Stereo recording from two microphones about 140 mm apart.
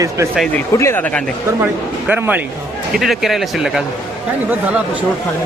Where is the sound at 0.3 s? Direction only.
5° left (ahead or behind).